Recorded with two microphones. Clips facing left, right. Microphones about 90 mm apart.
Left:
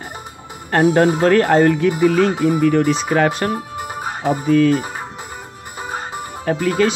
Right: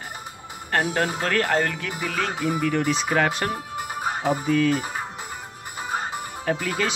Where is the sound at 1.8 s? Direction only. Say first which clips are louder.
Left 13 dB; 15° left (ahead or behind); by 4.8 s 5° right (ahead or behind).